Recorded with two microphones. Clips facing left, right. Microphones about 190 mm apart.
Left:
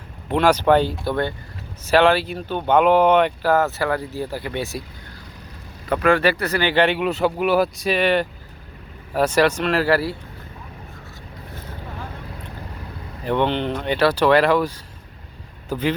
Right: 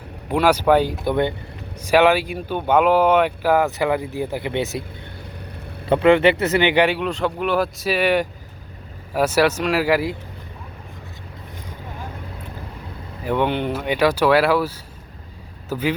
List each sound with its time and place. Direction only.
0.3 s speech: 10° right (ahead or behind)
5.8 s speech: 25° right (ahead or behind)
7.0 s speech: 5° left (ahead or behind); by 10.2 s 15° right (ahead or behind)
13.2 s speech: 10° right (ahead or behind)